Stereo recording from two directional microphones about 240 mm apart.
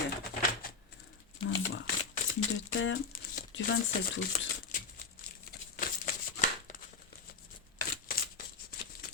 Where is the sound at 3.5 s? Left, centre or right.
Left.